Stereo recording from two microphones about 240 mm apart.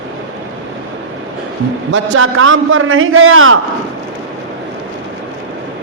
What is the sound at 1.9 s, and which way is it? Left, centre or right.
A man's voice, right.